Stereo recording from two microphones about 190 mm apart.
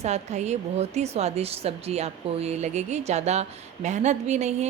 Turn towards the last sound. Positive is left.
turn(degrees=-35)  # may be behind; listen again after turning